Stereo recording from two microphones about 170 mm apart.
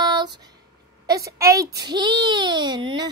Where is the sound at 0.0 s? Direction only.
25° right (ahead or behind).